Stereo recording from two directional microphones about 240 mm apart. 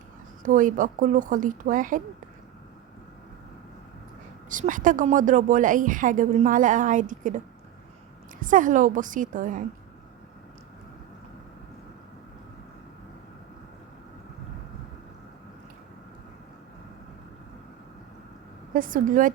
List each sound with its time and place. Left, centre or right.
0.4 s a woman's voice: right
4.4 s a woman's voice: right
18.7 s a woman's voice: right